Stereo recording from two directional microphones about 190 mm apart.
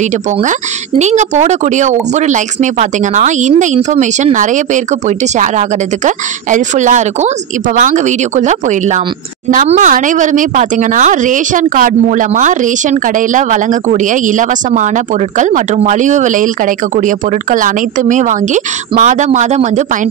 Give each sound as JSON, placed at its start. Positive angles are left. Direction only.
{"t": 0.4, "sound": "speech", "side_deg": -40}